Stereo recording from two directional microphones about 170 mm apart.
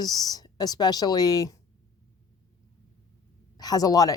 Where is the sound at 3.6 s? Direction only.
20° left (ahead or behind).